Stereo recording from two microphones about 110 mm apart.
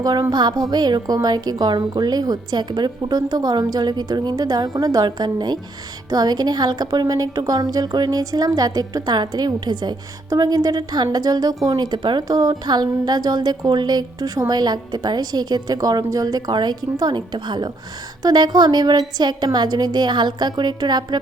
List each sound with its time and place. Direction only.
0.0 s a woman's voice: 35° right (ahead or behind)